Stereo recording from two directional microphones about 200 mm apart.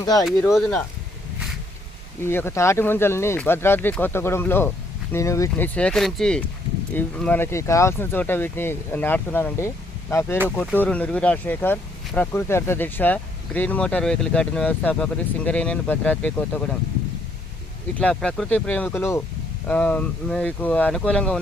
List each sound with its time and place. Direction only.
0.0 s speech: 20° left (ahead or behind)
0.3 s speech: centre (ahead or behind)
2.2 s speech: 10° left (ahead or behind)
18.0 s speech: 5° left (ahead or behind)